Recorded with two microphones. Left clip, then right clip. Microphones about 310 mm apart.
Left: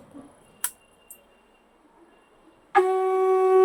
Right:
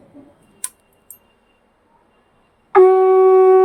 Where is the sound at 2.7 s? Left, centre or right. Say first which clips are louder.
Right 11 dB; centre.